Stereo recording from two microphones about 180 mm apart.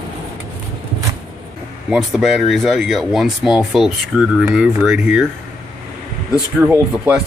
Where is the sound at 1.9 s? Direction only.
Centre (ahead or behind).